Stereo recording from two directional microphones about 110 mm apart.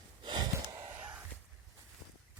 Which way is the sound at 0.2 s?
45° right (ahead or behind).